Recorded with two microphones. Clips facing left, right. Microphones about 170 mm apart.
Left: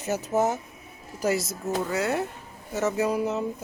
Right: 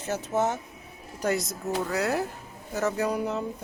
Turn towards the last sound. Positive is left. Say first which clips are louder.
# left 2 dB
turn(degrees=5)  # may be behind; listen again after turning